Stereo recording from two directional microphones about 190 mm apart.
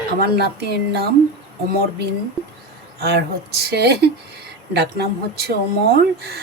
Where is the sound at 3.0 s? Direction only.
60° right (ahead or behind).